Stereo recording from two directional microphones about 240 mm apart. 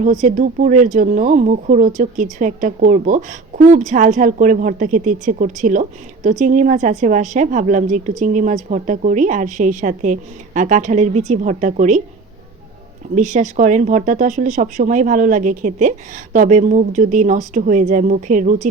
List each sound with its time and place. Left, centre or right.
0.0 s speech: right
13.1 s speech: right